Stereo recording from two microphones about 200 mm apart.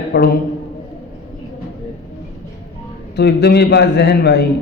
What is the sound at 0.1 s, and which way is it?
Speech, 55° left (ahead or behind).